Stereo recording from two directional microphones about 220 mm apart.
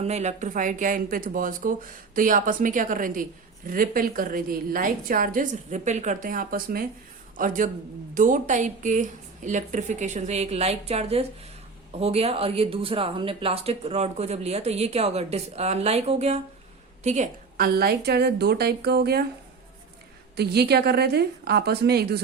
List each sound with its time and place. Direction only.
0.0 s a woman's voice: 30° right (ahead or behind); by 19.2 s 45° right (ahead or behind)
20.3 s a woman's voice: 45° right (ahead or behind)